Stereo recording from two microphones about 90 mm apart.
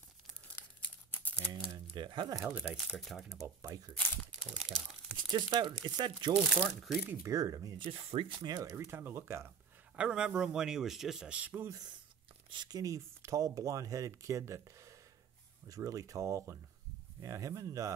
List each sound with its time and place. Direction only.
0.6 s crumpling: 20° left (ahead or behind)
2.0 s speech: 55° right (ahead or behind)
2.4 s speech: 25° right (ahead or behind)
2.7 s speech: 5° right (ahead or behind)
3.6 s speech: 40° right (ahead or behind)
4.4 s speech: centre (ahead or behind)
5.3 s speech: 55° right (ahead or behind)
6.3 s speech: 10° right (ahead or behind)
7.2 s speech: 40° right (ahead or behind)
7.8 s speech: 90° right
8.4 s speech: 50° right (ahead or behind)
8.6 s speech: 30° right (ahead or behind)
9.9 s speech: 10° right (ahead or behind)
12.4 s speech: 55° right (ahead or behind); by 17.9 s 40° right (ahead or behind)